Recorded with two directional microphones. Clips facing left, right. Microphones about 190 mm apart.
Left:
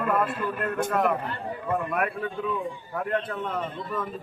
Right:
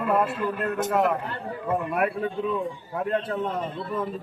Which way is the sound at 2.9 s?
25° right (ahead or behind).